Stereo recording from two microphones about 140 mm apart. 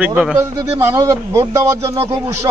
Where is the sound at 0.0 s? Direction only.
10° right (ahead or behind).